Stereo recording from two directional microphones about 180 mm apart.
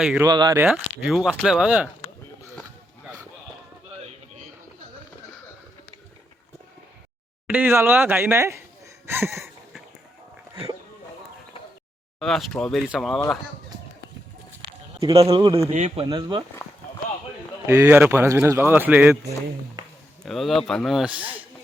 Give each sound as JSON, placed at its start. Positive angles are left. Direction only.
{"t": 0.2, "sound": "speech", "side_deg": -25}
{"t": 0.6, "sound": "speech", "side_deg": -5}
{"t": 7.4, "sound": "speech", "side_deg": -10}
{"t": 12.2, "sound": "speech", "side_deg": 0}
{"t": 14.9, "sound": "speech", "side_deg": -30}
{"t": 15.2, "sound": "speech", "side_deg": -20}
{"t": 15.7, "sound": "speech", "side_deg": -40}
{"t": 16.0, "sound": "speech", "side_deg": -25}
{"t": 17.7, "sound": "speech", "side_deg": -15}
{"t": 20.2, "sound": "speech", "side_deg": 0}